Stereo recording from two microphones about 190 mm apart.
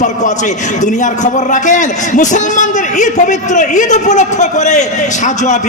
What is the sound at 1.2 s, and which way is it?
A man's voice, 40° left (ahead or behind).